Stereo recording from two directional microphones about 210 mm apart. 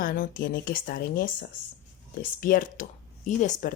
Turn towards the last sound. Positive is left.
turn(degrees=35)  # may be behind; listen again after turning